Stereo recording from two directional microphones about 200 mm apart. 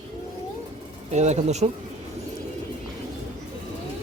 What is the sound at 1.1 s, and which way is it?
Speech, 35° right (ahead or behind).